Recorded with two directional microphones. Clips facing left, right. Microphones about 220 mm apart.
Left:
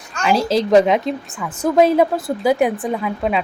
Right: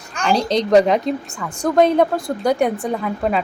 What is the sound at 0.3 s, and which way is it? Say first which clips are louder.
A woman's voice: left 1 dB; 5° left (ahead or behind).